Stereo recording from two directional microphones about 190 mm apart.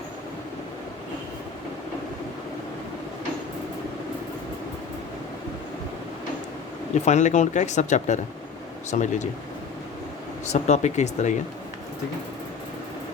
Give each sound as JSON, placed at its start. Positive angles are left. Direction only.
{"t": 7.0, "sound": "speech", "side_deg": 40}
{"t": 10.4, "sound": "speech", "side_deg": 35}